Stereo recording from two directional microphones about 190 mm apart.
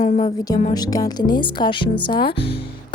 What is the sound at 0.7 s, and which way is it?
Speech, 20° left (ahead or behind).